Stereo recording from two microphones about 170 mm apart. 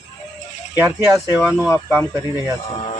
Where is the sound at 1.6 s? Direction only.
15° left (ahead or behind).